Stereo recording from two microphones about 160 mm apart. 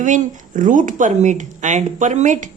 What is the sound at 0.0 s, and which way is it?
Speech, 50° right (ahead or behind).